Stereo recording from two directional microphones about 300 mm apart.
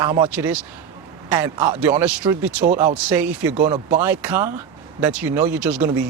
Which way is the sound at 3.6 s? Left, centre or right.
Right.